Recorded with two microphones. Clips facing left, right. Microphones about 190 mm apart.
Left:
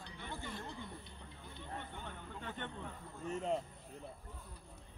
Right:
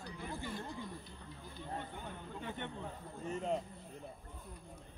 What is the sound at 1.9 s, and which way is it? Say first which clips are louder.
Speech: right 2 dB; 10° right (ahead or behind).